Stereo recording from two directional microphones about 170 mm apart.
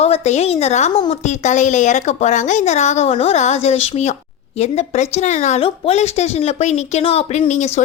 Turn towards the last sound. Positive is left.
turn(degrees=40)  # may be behind; listen again after turning